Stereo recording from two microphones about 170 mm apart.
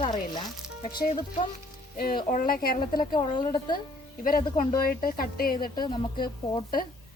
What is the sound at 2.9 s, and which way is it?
Speech, 25° left (ahead or behind).